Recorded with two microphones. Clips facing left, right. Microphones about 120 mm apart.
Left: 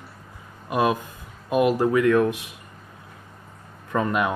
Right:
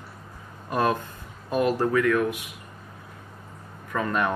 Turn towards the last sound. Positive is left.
turn(degrees=25)  # may be behind; listen again after turning